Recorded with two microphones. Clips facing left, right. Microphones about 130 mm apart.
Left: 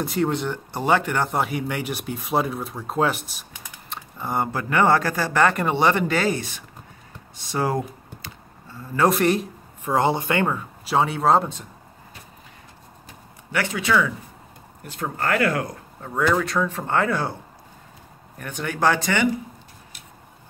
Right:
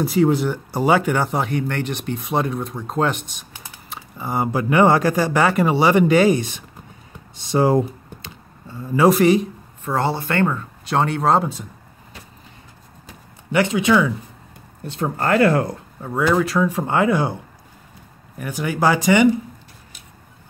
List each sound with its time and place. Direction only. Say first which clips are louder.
0.0 s a man's voice: right 6 dB; centre (ahead or behind)
3.9 s typing: right 2 dB; 5° right (ahead or behind)
4.5 s speech: right 5 dB; 15° right (ahead or behind)
7.3 s computer keyboard: right 7 dB; 25° right (ahead or behind)
8.9 s a man's voice: right 5 dB; 5° right (ahead or behind)
9.8 s speech: left 1 dB; 15° left (ahead or behind); by 11.6 s centre (ahead or behind)
13.5 s speech: right 6 dB; 20° right (ahead or behind)
16.0 s speech: right 3 dB; 10° right (ahead or behind)
18.4 s speech: right 3 dB; 5° right (ahead or behind)